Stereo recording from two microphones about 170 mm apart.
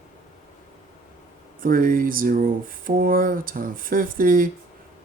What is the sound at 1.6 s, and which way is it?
Speech, 55° right (ahead or behind).